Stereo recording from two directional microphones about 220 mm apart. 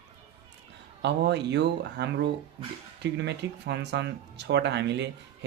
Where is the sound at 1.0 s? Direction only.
50° right (ahead or behind).